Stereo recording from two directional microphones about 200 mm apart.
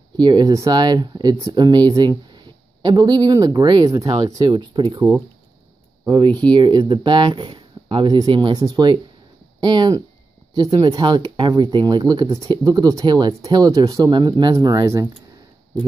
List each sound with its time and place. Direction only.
0.2 s speech: 20° right (ahead or behind)